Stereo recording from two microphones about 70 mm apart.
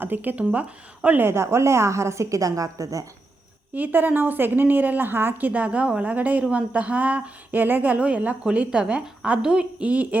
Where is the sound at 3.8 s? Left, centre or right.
Right.